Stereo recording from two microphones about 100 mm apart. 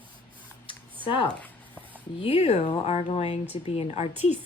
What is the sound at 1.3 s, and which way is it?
Zipper, 15° left (ahead or behind).